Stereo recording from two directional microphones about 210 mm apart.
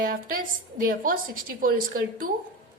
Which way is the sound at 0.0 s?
45° right (ahead or behind).